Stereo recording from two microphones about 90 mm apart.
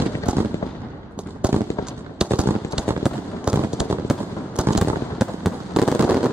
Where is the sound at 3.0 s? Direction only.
5° right (ahead or behind).